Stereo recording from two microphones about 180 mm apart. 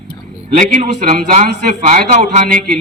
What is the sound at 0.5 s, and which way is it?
A man's voice, 40° right (ahead or behind).